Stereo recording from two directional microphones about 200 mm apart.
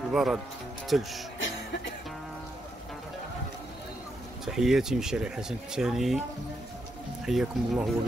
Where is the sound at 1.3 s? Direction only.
70° left (ahead or behind).